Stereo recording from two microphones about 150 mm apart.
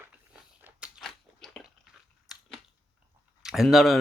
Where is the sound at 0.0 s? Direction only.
10° right (ahead or behind).